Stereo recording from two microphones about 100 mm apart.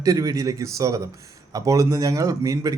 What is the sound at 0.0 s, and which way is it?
Speech, 35° right (ahead or behind).